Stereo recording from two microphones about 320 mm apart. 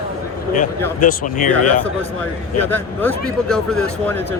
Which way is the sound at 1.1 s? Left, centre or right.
Left.